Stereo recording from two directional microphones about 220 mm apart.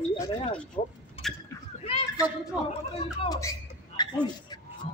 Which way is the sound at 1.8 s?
25° left (ahead or behind).